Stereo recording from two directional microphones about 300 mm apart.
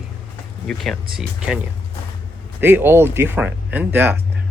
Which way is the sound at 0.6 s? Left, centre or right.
Centre.